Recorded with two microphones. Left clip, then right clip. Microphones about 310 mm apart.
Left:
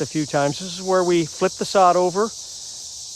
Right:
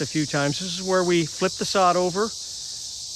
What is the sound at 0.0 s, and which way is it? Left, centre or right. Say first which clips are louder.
Speech: left 3 dB; centre.